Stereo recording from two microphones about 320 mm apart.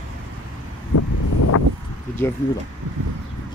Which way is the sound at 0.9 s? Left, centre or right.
Left.